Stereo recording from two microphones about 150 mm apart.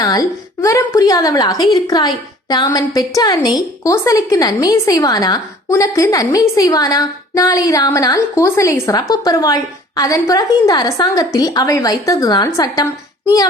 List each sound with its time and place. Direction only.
0.0 s a woman's voice: 25° left (ahead or behind)